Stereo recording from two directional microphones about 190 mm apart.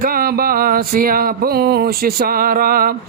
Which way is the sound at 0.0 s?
50° right (ahead or behind).